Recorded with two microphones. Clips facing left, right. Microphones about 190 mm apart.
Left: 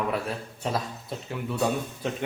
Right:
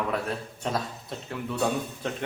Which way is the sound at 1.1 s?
5° left (ahead or behind).